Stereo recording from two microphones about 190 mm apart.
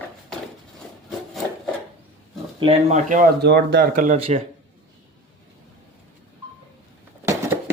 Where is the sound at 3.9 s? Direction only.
35° right (ahead or behind).